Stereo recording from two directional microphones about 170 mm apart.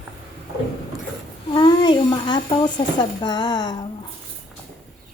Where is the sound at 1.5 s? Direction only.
30° left (ahead or behind).